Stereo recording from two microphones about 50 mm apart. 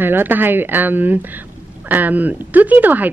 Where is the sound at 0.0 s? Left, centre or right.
Right.